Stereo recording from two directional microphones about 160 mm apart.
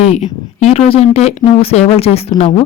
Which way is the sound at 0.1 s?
40° left (ahead or behind).